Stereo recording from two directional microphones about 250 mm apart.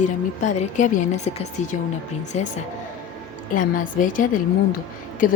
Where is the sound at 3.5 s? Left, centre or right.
Left.